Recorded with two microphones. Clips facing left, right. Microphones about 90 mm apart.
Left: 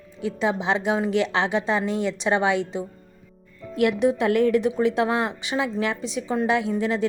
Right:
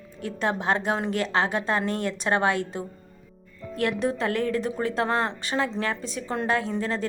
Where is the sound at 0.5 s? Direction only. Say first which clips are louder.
Left 1 dB; 45° right (ahead or behind).